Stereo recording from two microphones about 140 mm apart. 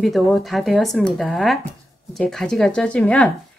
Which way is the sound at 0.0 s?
Centre (ahead or behind).